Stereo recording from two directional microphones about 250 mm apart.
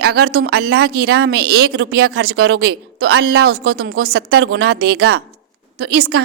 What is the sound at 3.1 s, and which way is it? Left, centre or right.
Speech, right.